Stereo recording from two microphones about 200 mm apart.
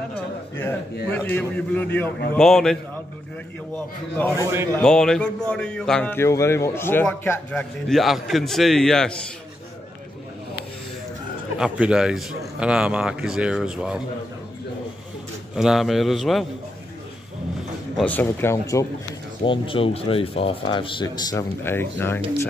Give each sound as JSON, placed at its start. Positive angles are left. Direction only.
{"t": 1.1, "sound": "a man's voice", "side_deg": 10}
{"t": 11.5, "sound": "a man's voice", "side_deg": -5}
{"t": 15.5, "sound": "a man's voice", "side_deg": 0}
{"t": 17.9, "sound": "a man's voice", "side_deg": 10}
{"t": 19.4, "sound": "speech", "side_deg": 25}